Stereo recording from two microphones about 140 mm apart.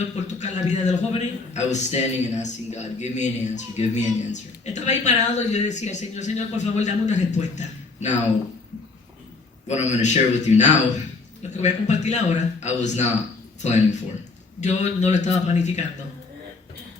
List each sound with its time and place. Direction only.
0.2 s a man's voice: 55° left (ahead or behind)
9.6 s a man's voice: 55° left (ahead or behind)